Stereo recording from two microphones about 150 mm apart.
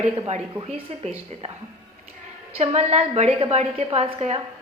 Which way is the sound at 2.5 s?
45° right (ahead or behind).